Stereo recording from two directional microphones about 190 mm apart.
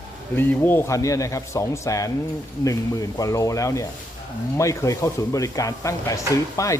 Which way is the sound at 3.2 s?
15° left (ahead or behind).